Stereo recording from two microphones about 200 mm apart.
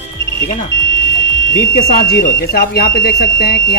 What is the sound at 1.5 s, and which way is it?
Speech, 45° left (ahead or behind).